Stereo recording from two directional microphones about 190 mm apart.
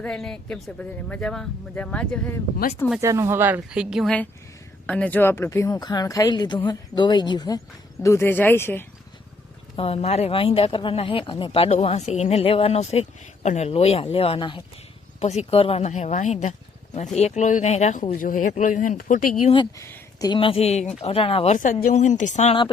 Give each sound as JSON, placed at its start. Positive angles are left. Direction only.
{"t": 0.0, "sound": "speech", "side_deg": 5}
{"t": 3.0, "sound": "speech", "side_deg": -15}
{"t": 9.7, "sound": "speech", "side_deg": 30}
{"t": 19.8, "sound": "speech", "side_deg": 15}